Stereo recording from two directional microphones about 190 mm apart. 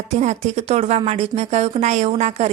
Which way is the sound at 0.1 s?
35° right (ahead or behind).